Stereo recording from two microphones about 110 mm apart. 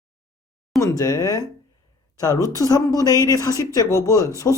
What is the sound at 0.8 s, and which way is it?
Speech, 30° left (ahead or behind).